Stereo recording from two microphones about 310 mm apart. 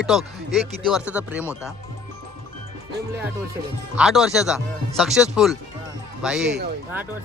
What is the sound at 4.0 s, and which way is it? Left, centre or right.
Speech, centre.